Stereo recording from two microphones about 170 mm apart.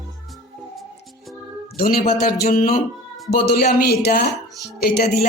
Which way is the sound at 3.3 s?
65° left (ahead or behind).